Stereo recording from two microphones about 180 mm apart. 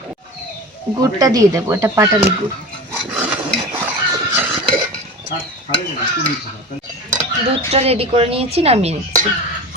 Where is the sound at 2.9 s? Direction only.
10° right (ahead or behind).